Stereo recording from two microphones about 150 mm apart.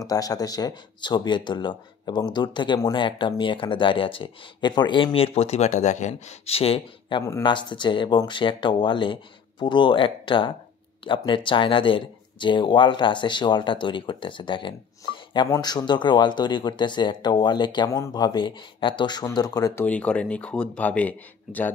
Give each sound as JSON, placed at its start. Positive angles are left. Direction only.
{"t": 0.0, "sound": "speech", "side_deg": 25}
{"t": 19.8, "sound": "speech", "side_deg": 10}